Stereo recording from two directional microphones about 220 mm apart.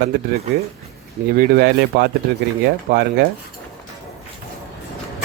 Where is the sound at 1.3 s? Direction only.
45° right (ahead or behind).